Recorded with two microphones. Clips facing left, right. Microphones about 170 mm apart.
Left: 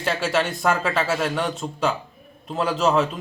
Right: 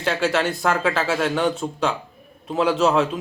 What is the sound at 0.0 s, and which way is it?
A man's voice, centre (ahead or behind).